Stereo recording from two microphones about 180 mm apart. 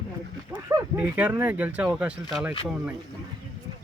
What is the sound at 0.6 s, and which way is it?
Speech, 15° right (ahead or behind).